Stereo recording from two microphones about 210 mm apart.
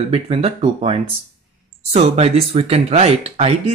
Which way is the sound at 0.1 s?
30° right (ahead or behind).